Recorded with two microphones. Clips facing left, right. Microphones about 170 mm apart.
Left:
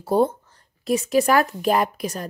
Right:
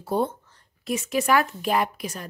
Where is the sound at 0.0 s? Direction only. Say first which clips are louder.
Left 6 dB; 40° left (ahead or behind).